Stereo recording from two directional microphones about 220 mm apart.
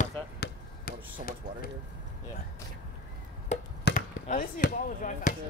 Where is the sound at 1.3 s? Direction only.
40° left (ahead or behind).